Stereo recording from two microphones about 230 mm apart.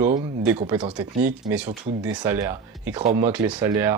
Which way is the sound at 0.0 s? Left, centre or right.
Centre.